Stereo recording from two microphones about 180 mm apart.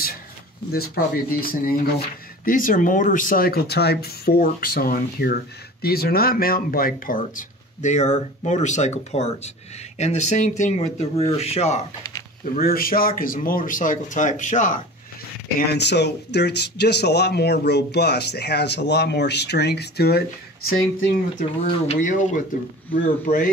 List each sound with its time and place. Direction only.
0.7 s speech: 60° left (ahead or behind); by 11.8 s 35° left (ahead or behind)
12.5 s speech: 55° left (ahead or behind)
15.7 s speech: 70° left (ahead or behind)
21.4 s speech: 45° left (ahead or behind)